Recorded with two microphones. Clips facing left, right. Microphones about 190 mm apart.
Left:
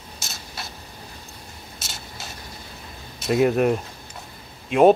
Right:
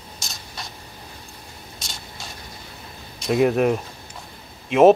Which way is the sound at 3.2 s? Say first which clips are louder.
Right 1 dB; centre (ahead or behind).